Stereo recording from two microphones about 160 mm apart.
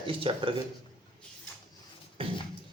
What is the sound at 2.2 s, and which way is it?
Music, 35° right (ahead or behind).